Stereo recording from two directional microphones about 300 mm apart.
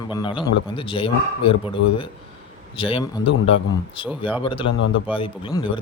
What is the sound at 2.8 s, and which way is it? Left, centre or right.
Speech, centre.